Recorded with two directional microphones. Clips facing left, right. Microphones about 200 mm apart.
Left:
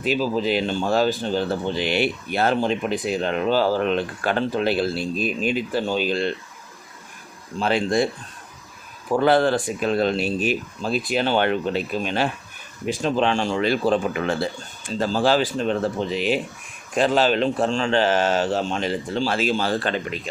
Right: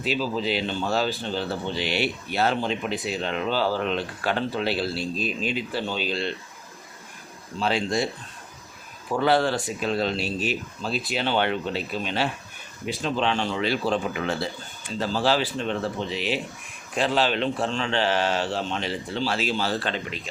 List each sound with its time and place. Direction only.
0.0 s speech: 50° left (ahead or behind)
7.6 s speech: 55° left (ahead or behind)
9.1 s speech: 50° left (ahead or behind)